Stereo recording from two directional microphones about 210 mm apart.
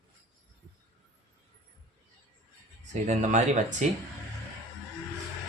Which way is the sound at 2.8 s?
35° right (ahead or behind).